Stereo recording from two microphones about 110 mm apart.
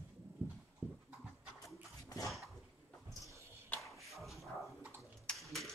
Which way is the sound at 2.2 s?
Centre (ahead or behind).